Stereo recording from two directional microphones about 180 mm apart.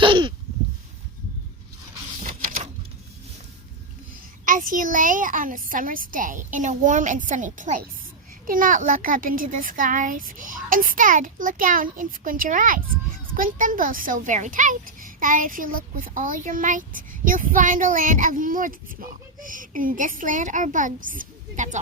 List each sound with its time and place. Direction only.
0.0 s a sound: 30° right (ahead or behind)
2.2 s printer: 50° right (ahead or behind)
4.4 s speech: 50° right (ahead or behind)